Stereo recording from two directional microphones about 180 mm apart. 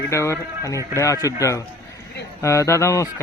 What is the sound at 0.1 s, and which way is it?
A man's voice, 15° left (ahead or behind).